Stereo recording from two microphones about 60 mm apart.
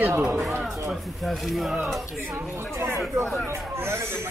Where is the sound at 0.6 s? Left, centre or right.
Centre.